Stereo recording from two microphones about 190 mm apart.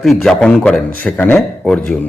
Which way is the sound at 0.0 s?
Centre (ahead or behind).